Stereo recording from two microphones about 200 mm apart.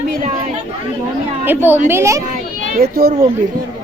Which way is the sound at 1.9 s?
15° right (ahead or behind).